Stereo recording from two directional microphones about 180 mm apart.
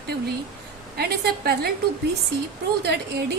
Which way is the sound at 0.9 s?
60° right (ahead or behind).